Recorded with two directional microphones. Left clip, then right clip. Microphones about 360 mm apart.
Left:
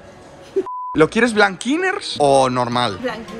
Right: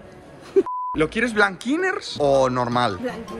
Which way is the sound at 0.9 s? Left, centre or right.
Centre.